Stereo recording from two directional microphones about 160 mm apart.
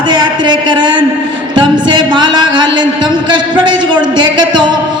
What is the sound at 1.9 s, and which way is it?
Music, 30° right (ahead or behind).